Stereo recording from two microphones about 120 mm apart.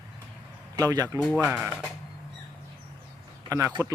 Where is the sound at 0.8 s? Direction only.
30° right (ahead or behind).